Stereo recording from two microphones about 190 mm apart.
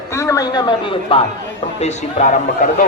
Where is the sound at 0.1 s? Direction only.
15° left (ahead or behind).